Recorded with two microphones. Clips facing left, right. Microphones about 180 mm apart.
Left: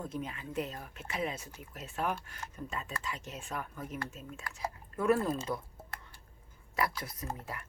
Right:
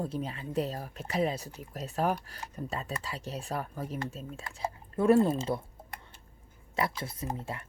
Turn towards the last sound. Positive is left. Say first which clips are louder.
# right 4 dB
turn(degrees=-25)  # may be behind; listen again after turning